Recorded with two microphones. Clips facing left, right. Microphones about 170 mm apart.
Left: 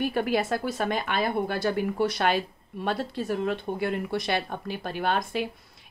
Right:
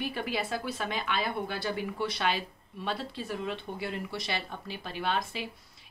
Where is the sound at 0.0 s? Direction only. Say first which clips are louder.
Left 8 dB; 50° left (ahead or behind).